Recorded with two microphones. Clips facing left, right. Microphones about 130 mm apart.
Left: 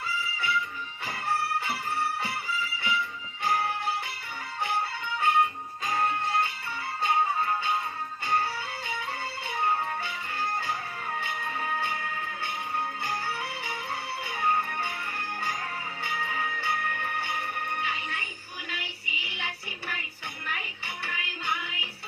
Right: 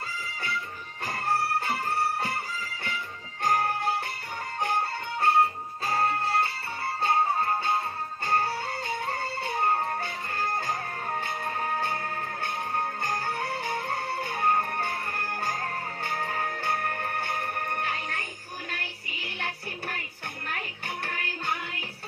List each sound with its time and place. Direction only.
0.3 s music: 40° right (ahead or behind)
8.9 s music: 40° right (ahead or behind)